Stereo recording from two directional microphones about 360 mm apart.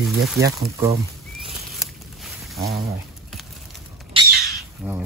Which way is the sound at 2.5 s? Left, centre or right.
Right.